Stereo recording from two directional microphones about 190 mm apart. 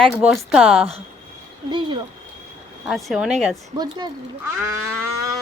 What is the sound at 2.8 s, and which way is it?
Speech, centre (ahead or behind).